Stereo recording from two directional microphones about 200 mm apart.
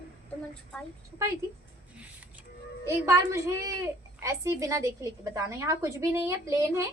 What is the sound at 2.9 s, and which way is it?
A woman's voice, 15° right (ahead or behind).